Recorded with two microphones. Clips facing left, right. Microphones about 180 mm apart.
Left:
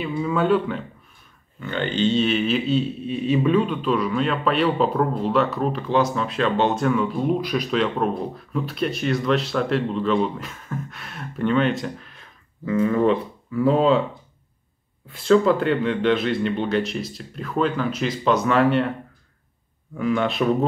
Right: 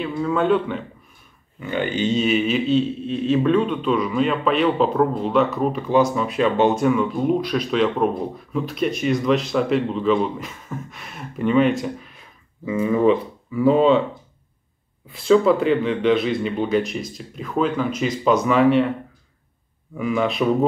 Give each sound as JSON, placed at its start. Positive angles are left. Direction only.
{"t": 0.0, "sound": "a man's voice", "side_deg": 5}
{"t": 1.6, "sound": "a man's voice", "side_deg": -10}
{"t": 15.0, "sound": "a man's voice", "side_deg": 0}
{"t": 20.0, "sound": "a man's voice", "side_deg": -5}